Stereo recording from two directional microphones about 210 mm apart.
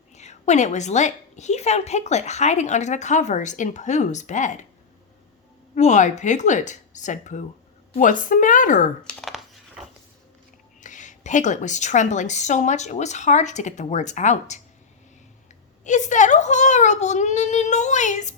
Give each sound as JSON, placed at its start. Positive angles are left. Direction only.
{"t": 0.1, "sound": "a woman's voice", "side_deg": 35}
{"t": 5.7, "sound": "a woman's voice", "side_deg": 35}
{"t": 9.0, "sound": "speech", "side_deg": 0}
{"t": 9.8, "sound": "a sound", "side_deg": -5}
{"t": 10.8, "sound": "a woman's voice", "side_deg": 35}
{"t": 15.8, "sound": "a woman's voice", "side_deg": 35}